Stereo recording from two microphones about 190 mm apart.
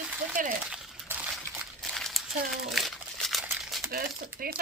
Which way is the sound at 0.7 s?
5° right (ahead or behind).